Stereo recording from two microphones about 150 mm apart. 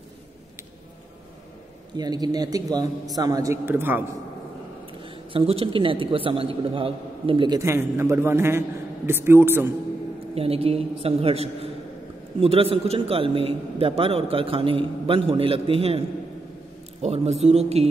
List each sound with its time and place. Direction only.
2.0 s a man's voice: 25° right (ahead or behind)
5.0 s a man's voice: 40° right (ahead or behind)
7.6 s a man's voice: 15° right (ahead or behind)
10.3 s a man's voice: 40° right (ahead or behind)
17.0 s speech: 45° right (ahead or behind)